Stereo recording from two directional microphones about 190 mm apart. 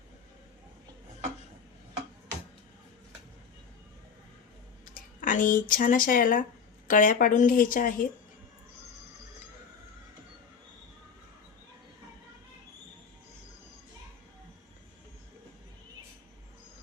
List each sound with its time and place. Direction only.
5.2 s a woman's voice: 45° left (ahead or behind)